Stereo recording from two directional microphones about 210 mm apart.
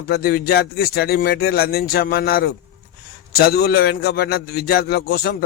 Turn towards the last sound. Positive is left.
turn(degrees=50)  # may be behind; listen again after turning